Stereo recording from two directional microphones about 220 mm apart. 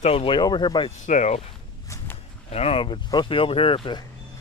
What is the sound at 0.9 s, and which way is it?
Speech, 35° left (ahead or behind).